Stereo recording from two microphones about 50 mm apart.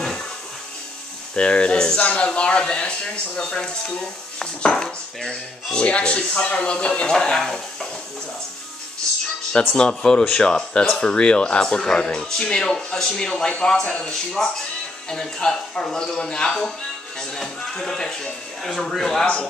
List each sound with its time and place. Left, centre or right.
1.3 s speech: left
5.8 s speech: left
9.8 s speech: centre